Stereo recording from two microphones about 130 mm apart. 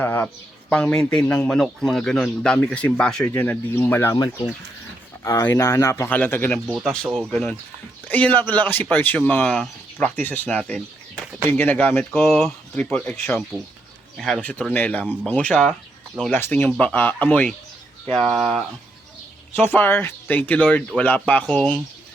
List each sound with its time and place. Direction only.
0.0 s a man's voice: 15° left (ahead or behind)
4.1 s a man's voice: 30° left (ahead or behind); by 18.6 s centre (ahead or behind)
19.5 s speech: 15° left (ahead or behind)